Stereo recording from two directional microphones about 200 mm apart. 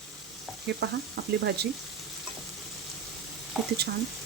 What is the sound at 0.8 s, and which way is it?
Speech, 55° right (ahead or behind).